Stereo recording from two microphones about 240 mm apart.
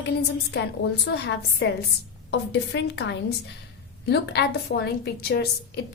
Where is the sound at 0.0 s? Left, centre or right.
Left.